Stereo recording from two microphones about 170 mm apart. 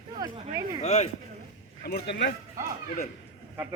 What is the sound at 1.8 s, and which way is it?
Speech, 75° left (ahead or behind).